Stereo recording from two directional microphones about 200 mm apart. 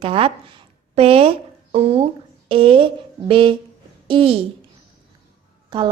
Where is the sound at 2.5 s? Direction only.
25° right (ahead or behind).